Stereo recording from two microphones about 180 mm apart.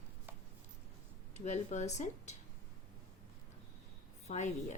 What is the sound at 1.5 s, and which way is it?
Speech, 40° left (ahead or behind).